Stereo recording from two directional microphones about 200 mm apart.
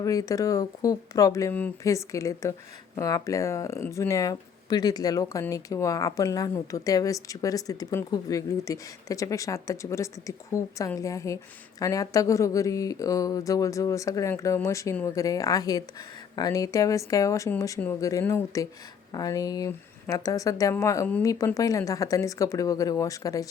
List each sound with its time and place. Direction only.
0.0 s speech: 15° left (ahead or behind)